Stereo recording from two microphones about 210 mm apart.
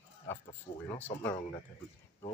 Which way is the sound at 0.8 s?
10° left (ahead or behind).